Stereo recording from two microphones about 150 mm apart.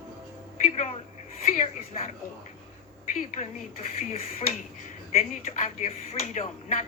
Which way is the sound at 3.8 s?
40° left (ahead or behind).